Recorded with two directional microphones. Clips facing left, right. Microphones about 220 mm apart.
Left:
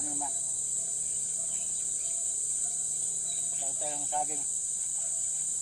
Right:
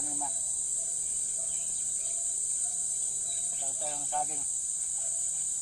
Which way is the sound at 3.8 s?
5° left (ahead or behind).